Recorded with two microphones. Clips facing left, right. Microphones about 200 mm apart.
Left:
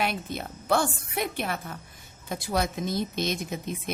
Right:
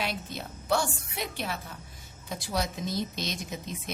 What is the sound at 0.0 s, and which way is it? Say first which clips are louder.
A woman's voice: left 4 dB; 55° left (ahead or behind).